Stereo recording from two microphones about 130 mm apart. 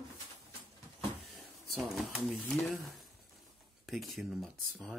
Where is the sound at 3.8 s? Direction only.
Centre (ahead or behind).